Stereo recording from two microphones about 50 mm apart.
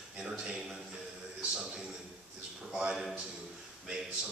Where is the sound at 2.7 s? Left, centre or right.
Centre.